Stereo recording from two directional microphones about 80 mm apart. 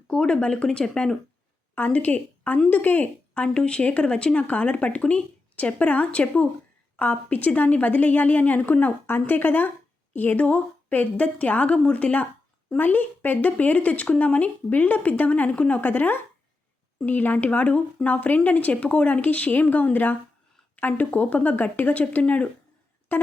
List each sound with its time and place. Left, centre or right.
0.1 s a woman's voice: centre